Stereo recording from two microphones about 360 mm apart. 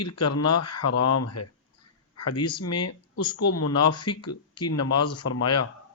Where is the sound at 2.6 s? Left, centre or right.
Left.